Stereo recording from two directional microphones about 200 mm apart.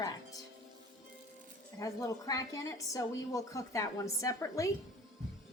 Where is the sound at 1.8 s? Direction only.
15° left (ahead or behind).